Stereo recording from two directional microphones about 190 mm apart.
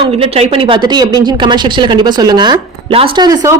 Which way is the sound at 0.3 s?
25° right (ahead or behind).